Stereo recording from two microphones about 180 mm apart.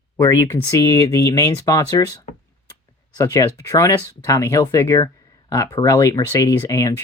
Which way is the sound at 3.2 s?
20° left (ahead or behind).